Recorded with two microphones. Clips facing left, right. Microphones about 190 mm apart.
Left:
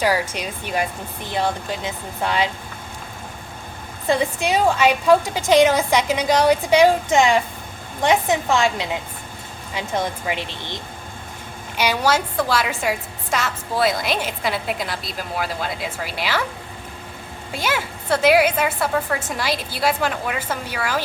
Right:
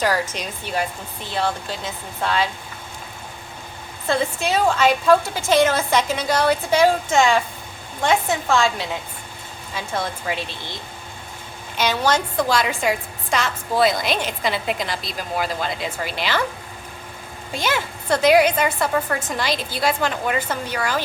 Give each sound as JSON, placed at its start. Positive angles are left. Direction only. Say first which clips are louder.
{"t": 0.0, "sound": "a woman's voice", "louder": "left 1 dB", "side_deg": 10}
{"t": 4.0, "sound": "a woman's voice", "louder": "left 2 dB", "side_deg": 15}
{"t": 11.8, "sound": "a woman's voice", "louder": "even", "side_deg": 10}
{"t": 17.5, "sound": "a woman's voice", "louder": "right 1 dB", "side_deg": 5}